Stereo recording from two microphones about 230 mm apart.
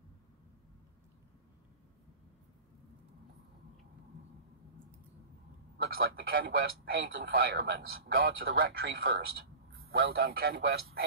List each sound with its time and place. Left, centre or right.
5.8 s a man's voice: right